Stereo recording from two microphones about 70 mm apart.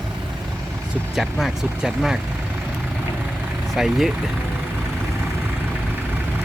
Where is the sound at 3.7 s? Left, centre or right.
Centre.